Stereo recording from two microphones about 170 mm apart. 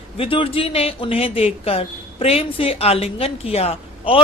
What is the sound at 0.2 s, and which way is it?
Speech, 35° left (ahead or behind).